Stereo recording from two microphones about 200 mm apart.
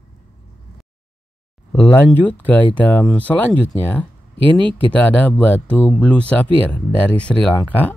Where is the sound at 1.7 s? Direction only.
10° left (ahead or behind).